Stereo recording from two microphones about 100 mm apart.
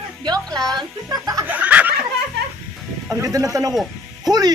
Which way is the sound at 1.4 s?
15° right (ahead or behind).